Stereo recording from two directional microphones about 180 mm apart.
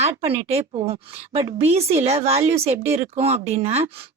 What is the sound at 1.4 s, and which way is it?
A woman's voice, 30° right (ahead or behind).